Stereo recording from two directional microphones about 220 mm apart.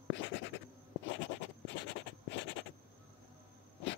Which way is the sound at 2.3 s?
55° left (ahead or behind).